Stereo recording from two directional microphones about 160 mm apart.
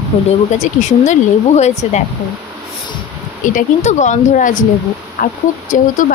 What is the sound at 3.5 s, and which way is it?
A woman's voice, 50° left (ahead or behind).